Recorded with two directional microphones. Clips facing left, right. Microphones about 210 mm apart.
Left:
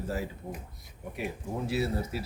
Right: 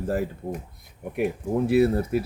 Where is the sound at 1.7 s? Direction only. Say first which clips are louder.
Right 11 dB; 55° right (ahead or behind).